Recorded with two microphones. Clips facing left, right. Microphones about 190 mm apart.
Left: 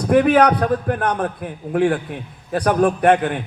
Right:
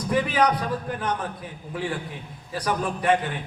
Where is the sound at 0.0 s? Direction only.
60° left (ahead or behind).